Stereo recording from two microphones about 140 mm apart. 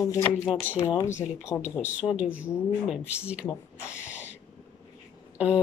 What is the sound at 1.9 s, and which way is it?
Speech, 10° right (ahead or behind).